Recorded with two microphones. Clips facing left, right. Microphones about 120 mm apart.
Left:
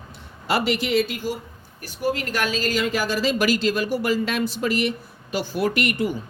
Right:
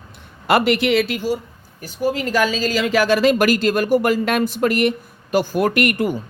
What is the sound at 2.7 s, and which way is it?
A man's voice, 90° right.